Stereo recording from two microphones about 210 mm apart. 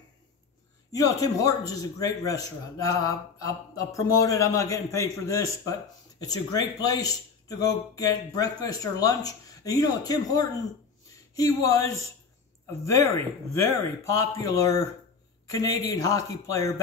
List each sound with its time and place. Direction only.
0.9 s a man's voice: 15° left (ahead or behind)
12.8 s a man's voice: 15° left (ahead or behind)